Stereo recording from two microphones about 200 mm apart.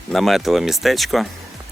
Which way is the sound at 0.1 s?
Centre (ahead or behind).